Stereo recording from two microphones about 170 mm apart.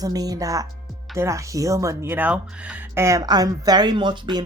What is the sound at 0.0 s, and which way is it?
Speech, 20° right (ahead or behind).